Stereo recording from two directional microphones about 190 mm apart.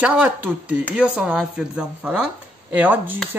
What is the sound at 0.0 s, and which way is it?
Speech, 5° right (ahead or behind).